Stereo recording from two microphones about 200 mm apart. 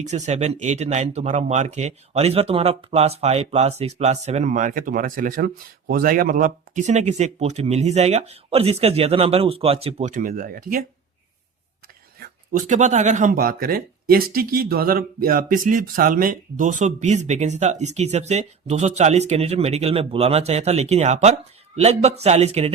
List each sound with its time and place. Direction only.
0.0 s speech: 35° right (ahead or behind)
12.2 s speech: 45° right (ahead or behind)